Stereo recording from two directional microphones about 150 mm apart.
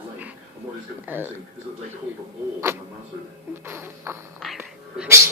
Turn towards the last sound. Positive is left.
turn(degrees=-15)  # may be behind; listen again after turning